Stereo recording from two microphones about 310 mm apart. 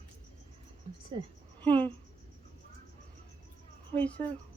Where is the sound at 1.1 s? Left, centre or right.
Centre.